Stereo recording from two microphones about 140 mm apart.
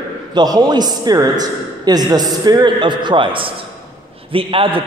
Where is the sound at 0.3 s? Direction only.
30° right (ahead or behind).